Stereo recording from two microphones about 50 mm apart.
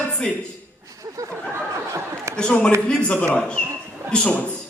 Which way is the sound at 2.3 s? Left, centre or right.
Centre.